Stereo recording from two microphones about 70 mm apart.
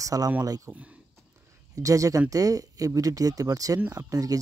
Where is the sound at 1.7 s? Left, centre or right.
Right.